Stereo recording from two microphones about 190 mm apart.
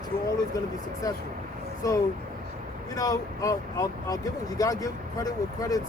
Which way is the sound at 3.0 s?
20° left (ahead or behind).